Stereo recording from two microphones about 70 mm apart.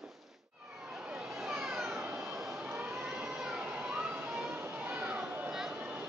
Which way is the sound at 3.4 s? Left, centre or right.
Centre.